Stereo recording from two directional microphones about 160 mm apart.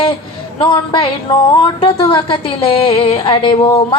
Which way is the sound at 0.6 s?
30° left (ahead or behind).